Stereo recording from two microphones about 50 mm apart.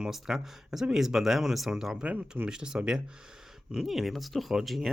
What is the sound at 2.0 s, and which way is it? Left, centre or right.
Speech, right.